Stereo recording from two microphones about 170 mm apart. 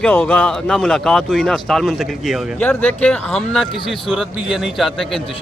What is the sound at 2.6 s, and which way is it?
A man's voice, 10° left (ahead or behind).